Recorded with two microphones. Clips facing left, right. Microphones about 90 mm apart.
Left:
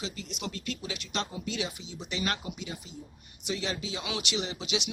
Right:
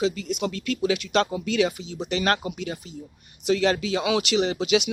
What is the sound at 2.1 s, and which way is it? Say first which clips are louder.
Speech: right 9 dB; 85° right.